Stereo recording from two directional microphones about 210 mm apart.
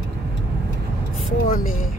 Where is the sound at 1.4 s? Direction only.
40° left (ahead or behind).